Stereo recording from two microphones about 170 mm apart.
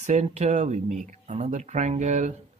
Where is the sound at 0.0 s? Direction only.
40° right (ahead or behind).